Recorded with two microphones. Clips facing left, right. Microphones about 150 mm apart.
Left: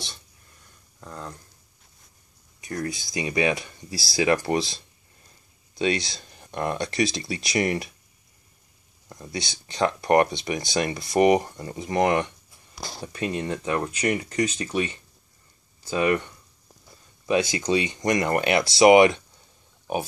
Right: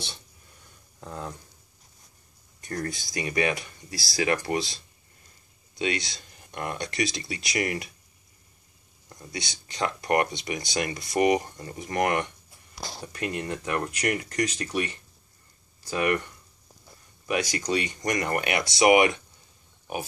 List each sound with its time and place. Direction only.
1.0 s speech: 10° right (ahead or behind)
2.6 s speech: 5° left (ahead or behind)
3.1 s speech: 20° left (ahead or behind)
5.8 s speech: 30° left (ahead or behind)
9.1 s speech: 30° left (ahead or behind)